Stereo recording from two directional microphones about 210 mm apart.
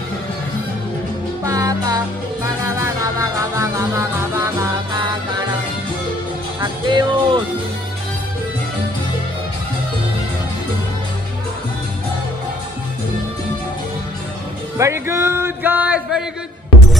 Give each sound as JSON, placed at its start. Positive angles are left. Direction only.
{"t": 1.4, "sound": "music", "side_deg": -15}
{"t": 6.6, "sound": "music", "side_deg": -20}
{"t": 14.8, "sound": "a sound", "side_deg": -15}